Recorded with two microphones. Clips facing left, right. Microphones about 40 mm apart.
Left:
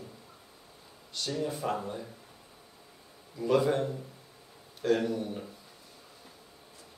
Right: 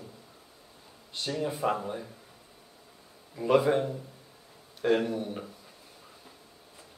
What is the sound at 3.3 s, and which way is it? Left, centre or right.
Speech, right.